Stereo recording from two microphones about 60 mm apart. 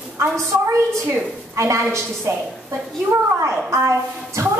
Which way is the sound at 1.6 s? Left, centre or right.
Right.